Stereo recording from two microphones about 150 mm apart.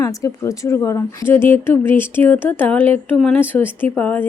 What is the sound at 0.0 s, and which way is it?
Speech, 20° left (ahead or behind).